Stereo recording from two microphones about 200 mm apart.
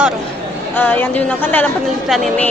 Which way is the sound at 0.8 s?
10° left (ahead or behind).